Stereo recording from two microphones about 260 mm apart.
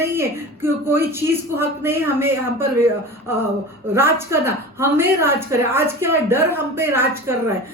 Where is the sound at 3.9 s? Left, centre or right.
Centre.